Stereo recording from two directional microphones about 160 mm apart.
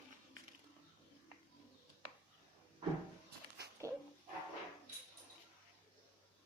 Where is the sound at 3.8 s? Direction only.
20° right (ahead or behind).